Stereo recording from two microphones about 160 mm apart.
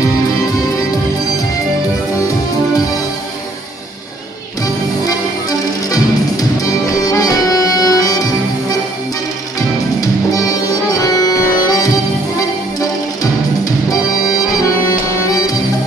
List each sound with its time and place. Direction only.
5.0 s music: 20° left (ahead or behind)